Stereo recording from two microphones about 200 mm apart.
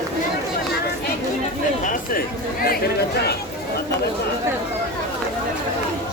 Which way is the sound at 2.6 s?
50° left (ahead or behind).